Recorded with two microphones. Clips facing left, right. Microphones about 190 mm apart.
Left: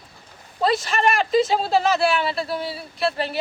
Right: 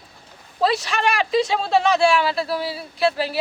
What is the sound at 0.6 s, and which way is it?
Speech, centre (ahead or behind).